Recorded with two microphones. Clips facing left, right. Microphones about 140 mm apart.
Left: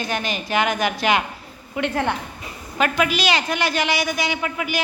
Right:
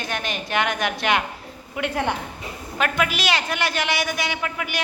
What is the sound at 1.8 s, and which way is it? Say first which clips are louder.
Speech: left 2 dB; 10° right (ahead or behind).